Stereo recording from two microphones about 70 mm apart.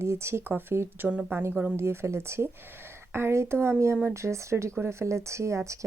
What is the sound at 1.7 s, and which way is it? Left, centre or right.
Speech, right.